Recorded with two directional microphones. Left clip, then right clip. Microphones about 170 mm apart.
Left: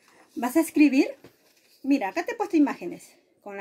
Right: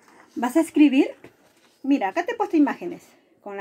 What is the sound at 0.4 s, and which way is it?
A woman's voice, centre (ahead or behind).